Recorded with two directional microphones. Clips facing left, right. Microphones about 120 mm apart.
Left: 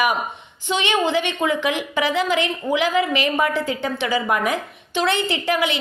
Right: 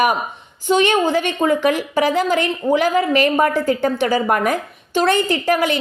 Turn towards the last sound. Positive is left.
turn(degrees=-45)  # may be behind; listen again after turning